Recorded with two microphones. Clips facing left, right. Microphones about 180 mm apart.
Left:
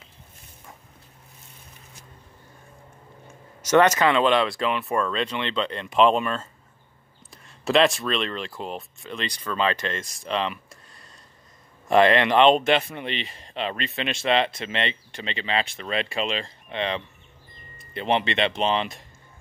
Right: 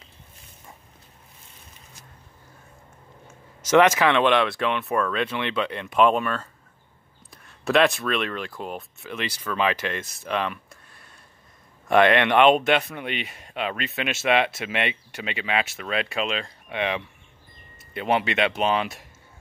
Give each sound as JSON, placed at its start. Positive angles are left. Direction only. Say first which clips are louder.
{"t": 3.3, "sound": "speech", "louder": "even", "side_deg": -10}
{"t": 7.6, "sound": "speech", "louder": "even", "side_deg": 0}
{"t": 10.2, "sound": "a sound", "louder": "even", "side_deg": -5}
{"t": 11.9, "sound": "speech", "louder": "even", "side_deg": 0}